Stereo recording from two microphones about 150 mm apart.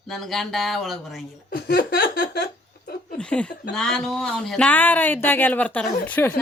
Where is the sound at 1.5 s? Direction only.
85° left.